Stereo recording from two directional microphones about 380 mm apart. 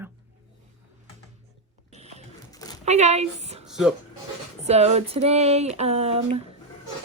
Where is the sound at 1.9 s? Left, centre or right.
Centre.